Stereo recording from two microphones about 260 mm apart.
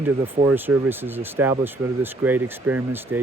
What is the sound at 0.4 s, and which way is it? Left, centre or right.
Speech, centre.